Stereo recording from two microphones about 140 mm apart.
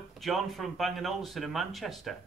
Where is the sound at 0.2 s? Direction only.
Centre (ahead or behind).